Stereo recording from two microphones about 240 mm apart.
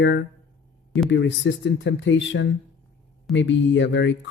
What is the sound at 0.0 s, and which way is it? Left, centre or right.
Speech, left.